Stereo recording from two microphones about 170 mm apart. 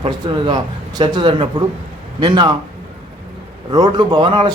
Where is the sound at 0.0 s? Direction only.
30° right (ahead or behind).